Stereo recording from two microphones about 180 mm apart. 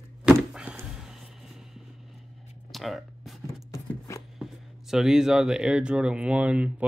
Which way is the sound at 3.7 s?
15° left (ahead or behind).